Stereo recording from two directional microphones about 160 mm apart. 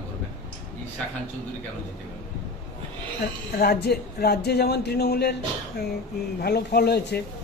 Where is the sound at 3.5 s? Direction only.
75° left (ahead or behind).